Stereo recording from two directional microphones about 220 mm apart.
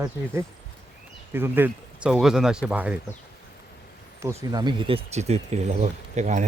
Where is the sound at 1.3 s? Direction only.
10° right (ahead or behind).